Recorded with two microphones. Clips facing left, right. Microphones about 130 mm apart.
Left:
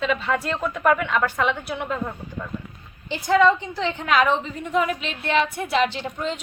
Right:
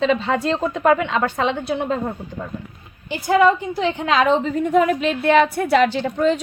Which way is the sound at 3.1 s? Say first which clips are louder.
Right 2 dB; 5° right (ahead or behind).